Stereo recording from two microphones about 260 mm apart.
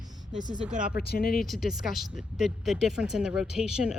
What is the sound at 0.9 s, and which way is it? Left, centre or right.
Speech, left.